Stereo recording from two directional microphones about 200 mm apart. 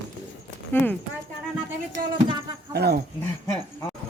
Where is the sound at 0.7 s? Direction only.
10° left (ahead or behind).